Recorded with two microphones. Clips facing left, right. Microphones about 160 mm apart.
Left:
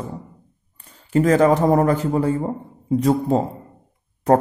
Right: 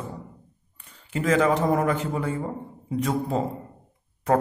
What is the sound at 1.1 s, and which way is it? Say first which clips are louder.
A man's voice: left 6 dB; 40° left (ahead or behind).